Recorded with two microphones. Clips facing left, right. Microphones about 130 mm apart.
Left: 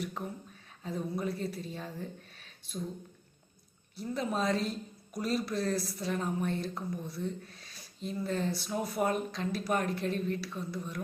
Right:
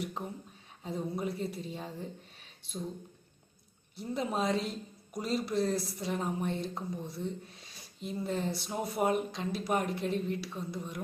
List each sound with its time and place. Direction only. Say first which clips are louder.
0.0 s speech: even; 20° right (ahead or behind)
3.9 s speech: even; 20° right (ahead or behind)